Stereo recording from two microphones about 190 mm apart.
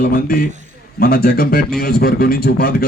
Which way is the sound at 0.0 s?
50° left (ahead or behind).